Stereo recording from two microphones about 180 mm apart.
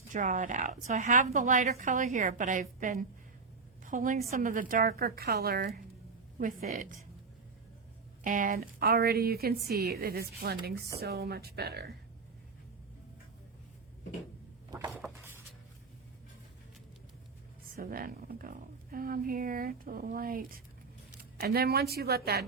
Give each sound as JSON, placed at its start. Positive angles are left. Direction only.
{"t": 0.1, "sound": "a woman's voice", "side_deg": -45}
{"t": 8.2, "sound": "speech", "side_deg": -50}
{"t": 14.7, "sound": "dishes", "side_deg": -20}
{"t": 14.9, "sound": "a sound", "side_deg": -5}
{"t": 17.7, "sound": "a woman's voice", "side_deg": -55}